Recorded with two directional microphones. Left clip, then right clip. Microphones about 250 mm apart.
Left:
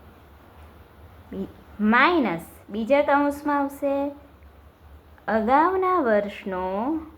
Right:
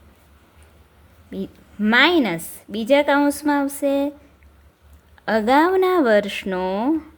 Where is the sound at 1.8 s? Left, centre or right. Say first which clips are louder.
Right 3 dB; right.